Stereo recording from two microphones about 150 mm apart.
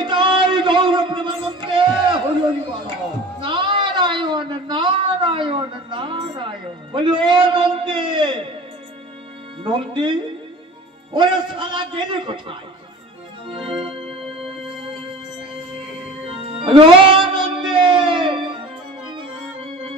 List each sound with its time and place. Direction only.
0.0 s music: 30° right (ahead or behind)
3.3 s a sound: 35° right (ahead or behind)
9.6 s a man's voice: 30° right (ahead or behind)
13.5 s organ: 35° right (ahead or behind)
16.3 s music: 35° right (ahead or behind)